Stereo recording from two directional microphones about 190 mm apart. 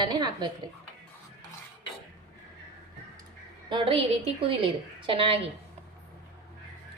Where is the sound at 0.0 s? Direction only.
20° right (ahead or behind).